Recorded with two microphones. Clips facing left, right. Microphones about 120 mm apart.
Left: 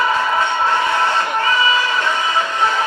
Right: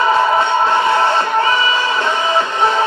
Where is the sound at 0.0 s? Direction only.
30° right (ahead or behind).